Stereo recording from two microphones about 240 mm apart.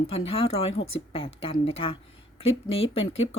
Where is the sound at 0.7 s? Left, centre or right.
Left.